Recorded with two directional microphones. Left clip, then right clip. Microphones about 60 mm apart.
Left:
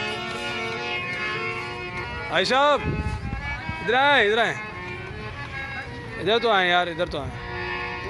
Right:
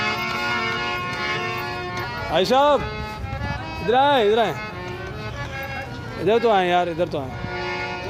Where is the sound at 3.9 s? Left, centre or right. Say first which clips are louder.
Right 2 dB; right.